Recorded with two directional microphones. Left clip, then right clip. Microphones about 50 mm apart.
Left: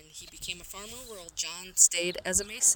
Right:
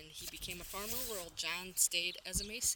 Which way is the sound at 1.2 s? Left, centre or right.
Left.